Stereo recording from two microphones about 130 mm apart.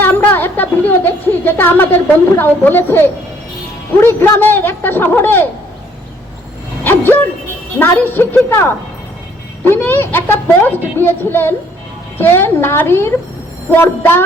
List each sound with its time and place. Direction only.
0.0 s a sound: 15° left (ahead or behind)
2.4 s a woman's voice: 15° left (ahead or behind)
6.8 s music: 15° left (ahead or behind)
7.8 s a woman's voice: 15° left (ahead or behind)